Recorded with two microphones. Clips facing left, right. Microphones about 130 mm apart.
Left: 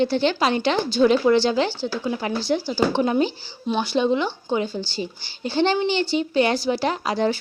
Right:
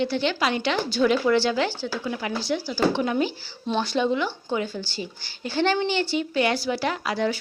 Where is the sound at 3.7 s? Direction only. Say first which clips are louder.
Left 2 dB; 5° left (ahead or behind).